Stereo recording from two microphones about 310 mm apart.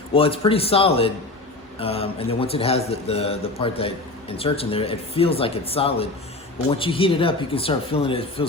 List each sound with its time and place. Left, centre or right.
0.1 s a man's voice: centre